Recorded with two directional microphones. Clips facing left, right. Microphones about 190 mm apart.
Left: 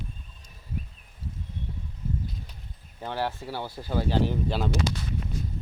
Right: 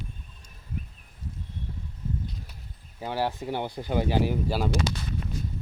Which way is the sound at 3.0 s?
10° right (ahead or behind).